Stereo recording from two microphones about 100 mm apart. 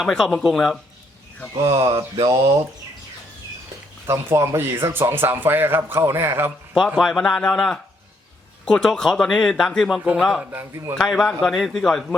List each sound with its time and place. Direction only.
0.0 s speech: 5° left (ahead or behind)
2.2 s speech: 40° right (ahead or behind)
4.0 s speech: 30° right (ahead or behind)
6.7 s speech: centre (ahead or behind)
10.0 s a man's voice: 15° right (ahead or behind)
10.7 s speech: 30° right (ahead or behind)
10.9 s speech: centre (ahead or behind)